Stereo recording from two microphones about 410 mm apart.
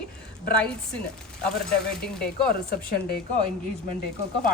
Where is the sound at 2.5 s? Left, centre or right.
Left.